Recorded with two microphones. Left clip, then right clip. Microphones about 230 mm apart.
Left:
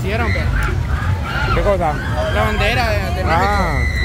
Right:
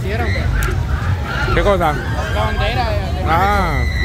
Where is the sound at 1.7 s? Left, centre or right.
Centre.